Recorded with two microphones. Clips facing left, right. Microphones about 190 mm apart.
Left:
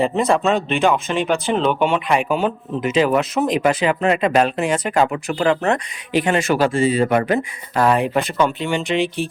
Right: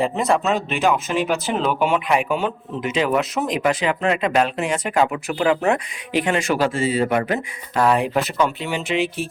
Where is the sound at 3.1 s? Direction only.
Centre (ahead or behind).